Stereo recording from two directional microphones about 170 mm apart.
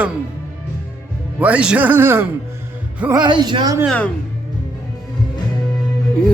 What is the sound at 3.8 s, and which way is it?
Music, 10° left (ahead or behind).